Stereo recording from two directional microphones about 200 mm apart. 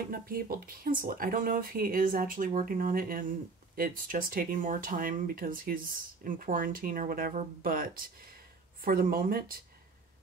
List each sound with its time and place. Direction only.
0.1 s speech: 45° right (ahead or behind)